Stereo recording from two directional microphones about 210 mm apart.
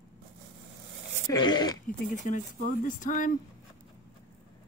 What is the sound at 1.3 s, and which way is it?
Throat clearing, 20° left (ahead or behind).